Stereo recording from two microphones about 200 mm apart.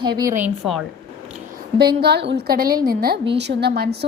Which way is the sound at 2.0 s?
55° right (ahead or behind).